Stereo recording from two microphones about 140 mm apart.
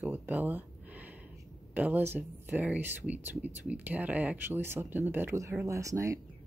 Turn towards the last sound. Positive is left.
turn(degrees=-20)  # may be behind; listen again after turning